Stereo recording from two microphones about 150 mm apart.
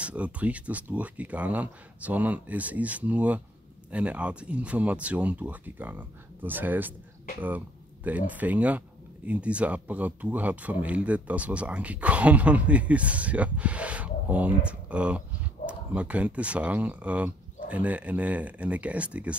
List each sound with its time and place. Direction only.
0.0 s speech: 10° right (ahead or behind)